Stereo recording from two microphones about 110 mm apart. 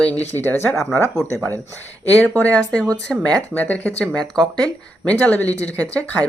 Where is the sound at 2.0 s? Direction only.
15° left (ahead or behind).